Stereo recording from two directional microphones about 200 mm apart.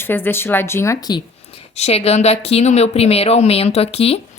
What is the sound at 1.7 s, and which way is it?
Speech, 30° left (ahead or behind).